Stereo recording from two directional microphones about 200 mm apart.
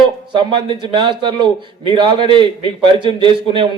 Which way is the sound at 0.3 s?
25° right (ahead or behind).